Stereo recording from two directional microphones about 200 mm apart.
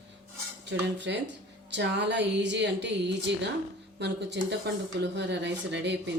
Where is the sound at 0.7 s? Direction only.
65° right (ahead or behind).